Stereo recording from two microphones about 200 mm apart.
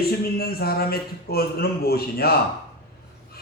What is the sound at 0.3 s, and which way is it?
Speech, 50° left (ahead or behind).